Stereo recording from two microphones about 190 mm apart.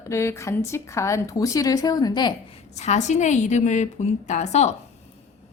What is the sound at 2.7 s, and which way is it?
A woman's voice, 35° left (ahead or behind).